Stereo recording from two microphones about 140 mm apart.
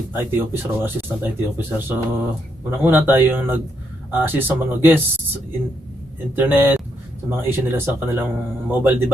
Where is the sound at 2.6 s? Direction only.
15° right (ahead or behind).